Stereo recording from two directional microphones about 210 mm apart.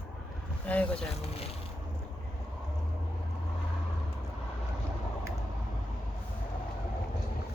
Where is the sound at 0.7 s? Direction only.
5° left (ahead or behind).